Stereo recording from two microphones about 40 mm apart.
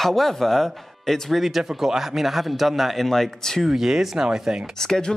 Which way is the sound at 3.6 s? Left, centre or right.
Centre.